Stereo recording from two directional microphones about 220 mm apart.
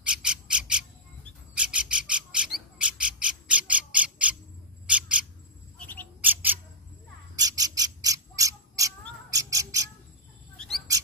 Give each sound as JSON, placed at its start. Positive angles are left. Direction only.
{"t": 0.0, "sound": "bird", "side_deg": -5}
{"t": 6.2, "sound": "bird", "side_deg": -10}